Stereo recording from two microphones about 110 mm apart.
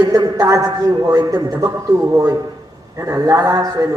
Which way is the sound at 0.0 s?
40° right (ahead or behind).